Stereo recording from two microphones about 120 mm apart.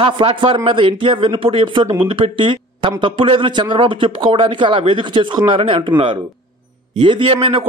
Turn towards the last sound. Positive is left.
turn(degrees=-50)  # may be behind; listen again after turning